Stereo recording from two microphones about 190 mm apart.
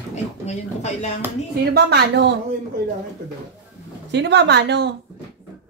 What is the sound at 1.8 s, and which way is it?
Speech, 55° right (ahead or behind).